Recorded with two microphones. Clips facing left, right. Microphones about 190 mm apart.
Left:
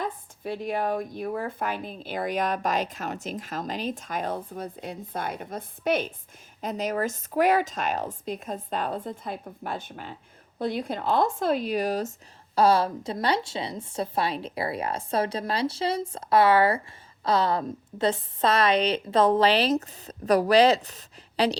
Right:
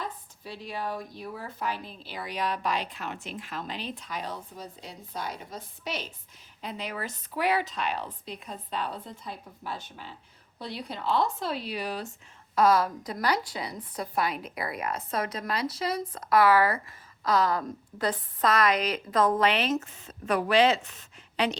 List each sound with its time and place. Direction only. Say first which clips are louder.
0.0 s speech: left 6 dB; 55° left (ahead or behind)
12.5 s a woman's voice: left 2 dB; 30° left (ahead or behind)